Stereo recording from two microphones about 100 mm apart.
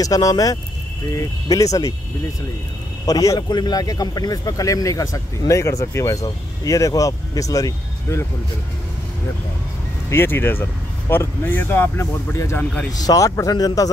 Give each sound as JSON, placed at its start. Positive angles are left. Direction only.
{"t": 0.0, "sound": "a man's voice", "side_deg": 35}
{"t": 3.1, "sound": "a man's voice", "side_deg": 40}
{"t": 10.0, "sound": "a man's voice", "side_deg": 25}